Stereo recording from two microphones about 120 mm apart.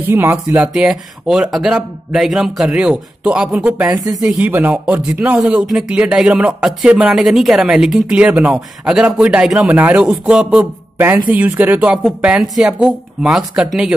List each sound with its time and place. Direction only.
0.1 s a man's voice: 20° right (ahead or behind)
3.9 s speech: 30° right (ahead or behind)
4.2 s a man's voice: 10° right (ahead or behind)